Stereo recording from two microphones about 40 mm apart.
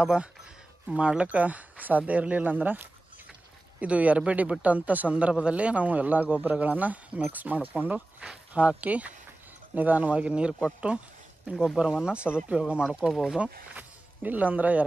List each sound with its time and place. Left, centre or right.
0.0 s speech: right
2.4 s speech: right
3.8 s speech: right
8.5 s speech: right
10.1 s speech: right
11.4 s speech: centre
12.0 s speech: right
13.1 s speech: centre
13.4 s speech: right